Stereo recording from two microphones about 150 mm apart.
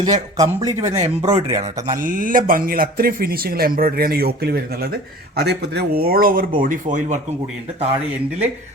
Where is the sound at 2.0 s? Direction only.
65° right (ahead or behind).